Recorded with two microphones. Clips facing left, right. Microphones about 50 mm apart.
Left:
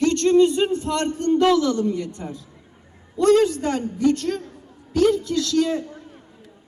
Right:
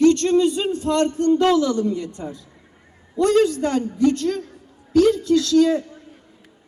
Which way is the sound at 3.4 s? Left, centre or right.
Left.